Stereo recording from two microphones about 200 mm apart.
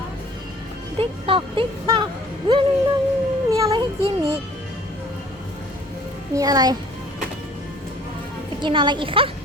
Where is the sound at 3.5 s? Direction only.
15° right (ahead or behind).